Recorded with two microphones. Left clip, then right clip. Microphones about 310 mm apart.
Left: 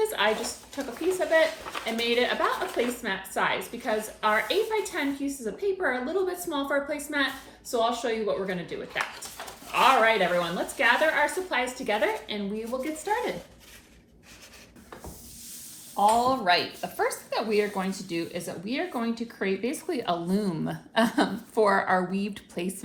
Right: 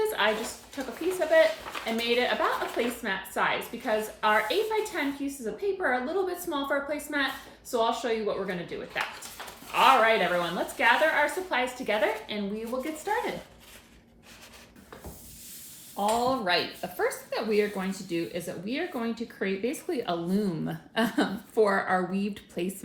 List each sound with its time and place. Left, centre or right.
0.1 s speech: centre
16.2 s speech: centre